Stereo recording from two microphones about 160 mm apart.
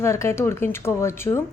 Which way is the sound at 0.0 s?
15° left (ahead or behind).